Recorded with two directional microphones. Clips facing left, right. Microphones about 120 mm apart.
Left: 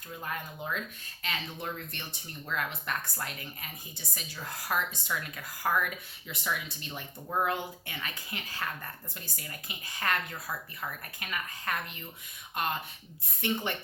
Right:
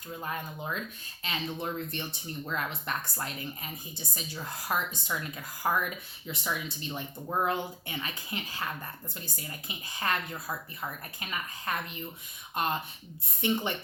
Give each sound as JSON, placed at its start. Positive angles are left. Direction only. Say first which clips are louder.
{"t": 0.2, "sound": "speech", "louder": "right 1 dB", "side_deg": -20}
{"t": 13.4, "sound": "speech", "louder": "right 3 dB", "side_deg": -20}